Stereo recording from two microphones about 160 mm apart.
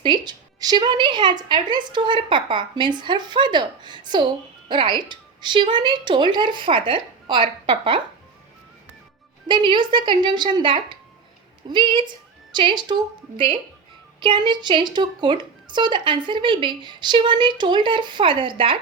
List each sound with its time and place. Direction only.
0.0 s a woman's voice: 30° right (ahead or behind)
9.5 s a woman's voice: 30° right (ahead or behind)